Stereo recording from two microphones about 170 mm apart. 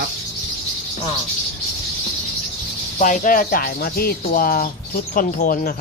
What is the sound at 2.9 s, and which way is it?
Speech, 45° left (ahead or behind).